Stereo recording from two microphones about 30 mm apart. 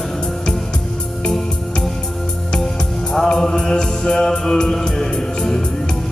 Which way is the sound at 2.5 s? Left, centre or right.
Centre.